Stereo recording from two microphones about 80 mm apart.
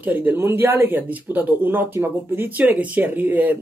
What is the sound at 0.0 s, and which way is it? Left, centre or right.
Speech, right.